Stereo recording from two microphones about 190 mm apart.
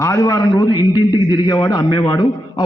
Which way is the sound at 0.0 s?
15° left (ahead or behind).